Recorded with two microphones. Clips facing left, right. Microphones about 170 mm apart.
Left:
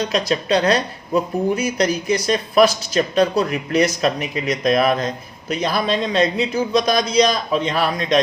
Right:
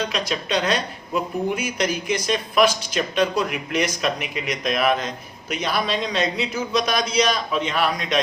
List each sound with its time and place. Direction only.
0.1 s speech: 40° left (ahead or behind)